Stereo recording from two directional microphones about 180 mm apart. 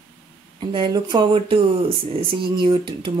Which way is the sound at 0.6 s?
30° right (ahead or behind).